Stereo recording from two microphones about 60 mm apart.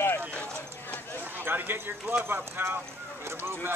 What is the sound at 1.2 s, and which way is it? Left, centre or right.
Speech, right.